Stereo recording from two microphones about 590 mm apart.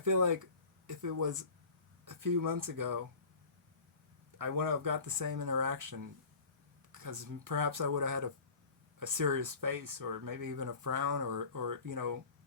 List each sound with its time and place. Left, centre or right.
0.0 s speech: right
4.4 s speech: right